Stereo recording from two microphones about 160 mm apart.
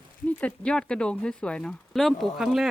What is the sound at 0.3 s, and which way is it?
Speech, 10° left (ahead or behind).